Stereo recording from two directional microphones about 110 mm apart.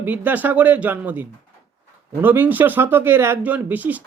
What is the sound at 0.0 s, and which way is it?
Speech, 15° right (ahead or behind).